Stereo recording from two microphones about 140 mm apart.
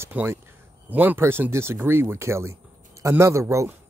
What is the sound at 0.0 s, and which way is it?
Speech, 15° right (ahead or behind).